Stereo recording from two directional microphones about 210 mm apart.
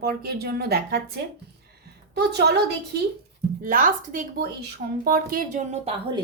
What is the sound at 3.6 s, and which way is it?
A woman's voice, 40° right (ahead or behind).